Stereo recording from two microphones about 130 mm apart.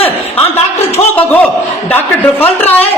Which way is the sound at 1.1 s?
10° left (ahead or behind).